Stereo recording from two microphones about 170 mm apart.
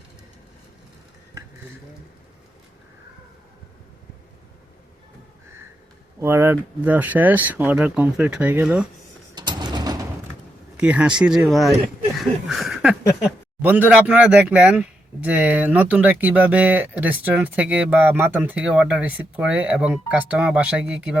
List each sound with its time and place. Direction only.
6.1 s speech: 15° right (ahead or behind)
9.3 s mechanisms: 25° right (ahead or behind)
10.8 s speech: 5° right (ahead or behind)